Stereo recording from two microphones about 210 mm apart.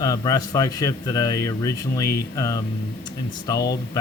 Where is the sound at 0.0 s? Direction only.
15° left (ahead or behind).